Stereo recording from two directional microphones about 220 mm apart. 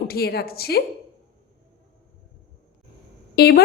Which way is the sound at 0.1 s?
45° left (ahead or behind).